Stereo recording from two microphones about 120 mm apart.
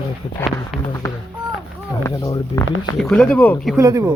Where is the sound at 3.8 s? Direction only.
25° right (ahead or behind).